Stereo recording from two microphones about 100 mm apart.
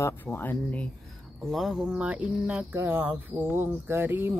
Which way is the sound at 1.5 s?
Centre (ahead or behind).